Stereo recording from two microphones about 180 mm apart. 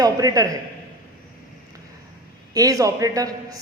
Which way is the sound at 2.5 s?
20° right (ahead or behind).